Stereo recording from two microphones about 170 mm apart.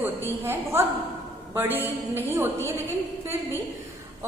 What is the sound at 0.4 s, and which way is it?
A woman's voice, 15° right (ahead or behind).